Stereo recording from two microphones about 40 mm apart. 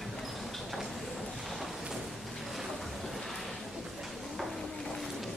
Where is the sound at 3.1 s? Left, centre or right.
Centre.